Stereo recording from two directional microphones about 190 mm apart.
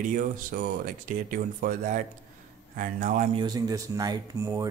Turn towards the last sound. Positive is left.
turn(degrees=-20)  # may be behind; listen again after turning